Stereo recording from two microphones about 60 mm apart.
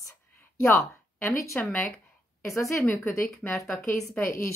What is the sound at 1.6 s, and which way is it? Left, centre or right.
Speech, left.